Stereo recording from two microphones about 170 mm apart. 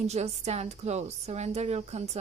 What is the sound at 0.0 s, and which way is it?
A woman's voice, 40° right (ahead or behind).